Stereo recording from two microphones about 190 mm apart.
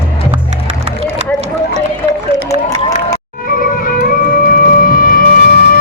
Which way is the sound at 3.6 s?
45° left (ahead or behind).